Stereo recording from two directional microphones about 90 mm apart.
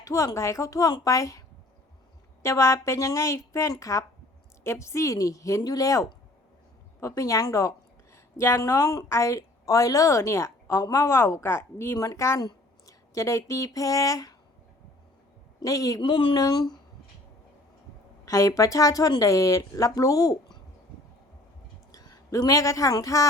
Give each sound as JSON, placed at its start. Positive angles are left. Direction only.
{"t": 0.0, "sound": "a woman's voice", "side_deg": 35}
{"t": 7.2, "sound": "a woman's voice", "side_deg": 40}
{"t": 15.6, "sound": "a woman's voice", "side_deg": 40}
{"t": 16.0, "sound": "speech", "side_deg": 75}
{"t": 16.3, "sound": "speech", "side_deg": 50}
{"t": 18.3, "sound": "a woman's voice", "side_deg": 35}
{"t": 21.9, "sound": "speech", "side_deg": 45}